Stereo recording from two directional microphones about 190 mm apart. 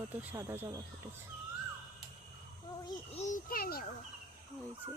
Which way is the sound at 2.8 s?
35° left (ahead or behind).